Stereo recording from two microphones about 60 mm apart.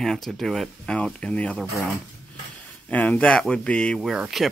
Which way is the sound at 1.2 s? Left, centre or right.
Left.